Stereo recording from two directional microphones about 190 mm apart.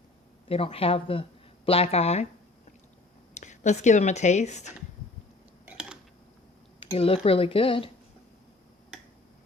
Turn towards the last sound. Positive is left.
turn(degrees=30)  # may be behind; listen again after turning